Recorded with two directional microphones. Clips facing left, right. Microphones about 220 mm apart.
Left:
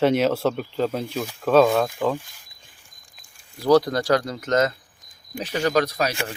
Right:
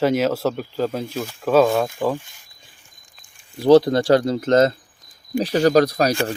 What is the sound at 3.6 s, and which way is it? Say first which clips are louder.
Speech: right 5 dB; 25° right (ahead or behind).